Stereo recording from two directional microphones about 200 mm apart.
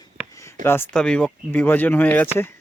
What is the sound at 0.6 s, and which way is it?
Speech, 10° left (ahead or behind).